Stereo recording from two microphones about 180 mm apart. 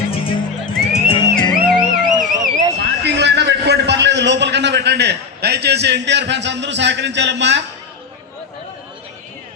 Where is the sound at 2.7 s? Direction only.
65° right (ahead or behind).